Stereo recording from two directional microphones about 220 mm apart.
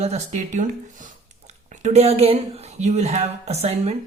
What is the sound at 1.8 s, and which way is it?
Speech, 30° right (ahead or behind).